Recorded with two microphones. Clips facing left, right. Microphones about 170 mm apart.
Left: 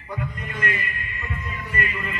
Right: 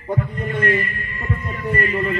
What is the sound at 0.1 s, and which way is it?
Heart sounds, 35° right (ahead or behind).